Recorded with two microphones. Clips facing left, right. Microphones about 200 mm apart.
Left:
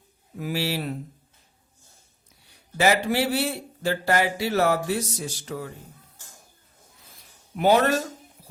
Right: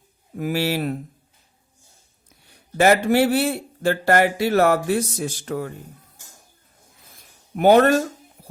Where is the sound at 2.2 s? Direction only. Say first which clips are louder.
Right 6 dB; 55° right (ahead or behind).